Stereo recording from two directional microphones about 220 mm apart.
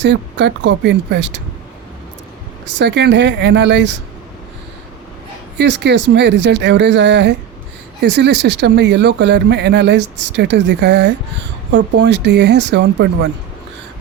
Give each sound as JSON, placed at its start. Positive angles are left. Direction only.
{"t": 0.0, "sound": "speech", "side_deg": -55}
{"t": 2.7, "sound": "speech", "side_deg": -50}
{"t": 5.5, "sound": "speech", "side_deg": -50}